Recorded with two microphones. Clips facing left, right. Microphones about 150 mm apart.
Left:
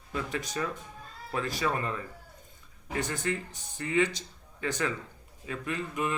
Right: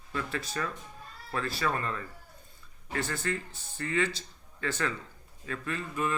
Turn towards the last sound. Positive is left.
turn(degrees=15)  # may be behind; listen again after turning